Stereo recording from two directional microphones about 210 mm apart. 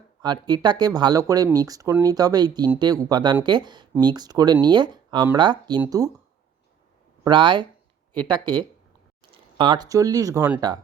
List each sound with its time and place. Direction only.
0.2 s speech: 20° right (ahead or behind)
7.3 s speech: 20° right (ahead or behind)